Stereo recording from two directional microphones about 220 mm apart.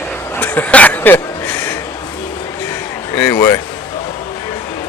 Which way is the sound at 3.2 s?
15° left (ahead or behind).